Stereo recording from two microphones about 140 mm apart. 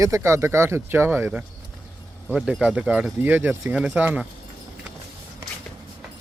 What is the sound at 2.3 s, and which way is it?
Speech, 5° right (ahead or behind).